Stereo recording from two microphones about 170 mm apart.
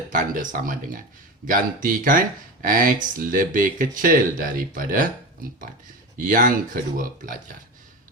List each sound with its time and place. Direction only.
0.1 s speech: 55° right (ahead or behind)